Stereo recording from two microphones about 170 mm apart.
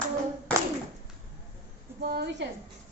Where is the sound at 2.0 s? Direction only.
75° right (ahead or behind).